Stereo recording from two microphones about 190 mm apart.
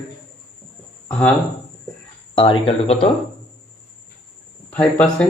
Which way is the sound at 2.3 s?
25° left (ahead or behind).